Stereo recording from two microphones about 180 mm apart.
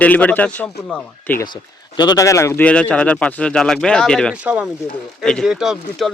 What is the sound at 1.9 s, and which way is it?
Speech, 25° left (ahead or behind).